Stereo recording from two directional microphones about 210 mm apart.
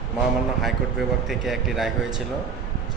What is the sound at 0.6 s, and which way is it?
Speech, centre (ahead or behind).